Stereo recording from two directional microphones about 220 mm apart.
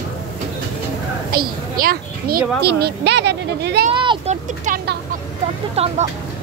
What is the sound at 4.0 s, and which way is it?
Speech, 20° right (ahead or behind).